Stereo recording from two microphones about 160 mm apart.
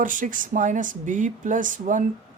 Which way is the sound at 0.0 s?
55° right (ahead or behind).